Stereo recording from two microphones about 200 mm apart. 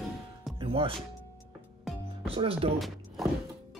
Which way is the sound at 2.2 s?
30° right (ahead or behind).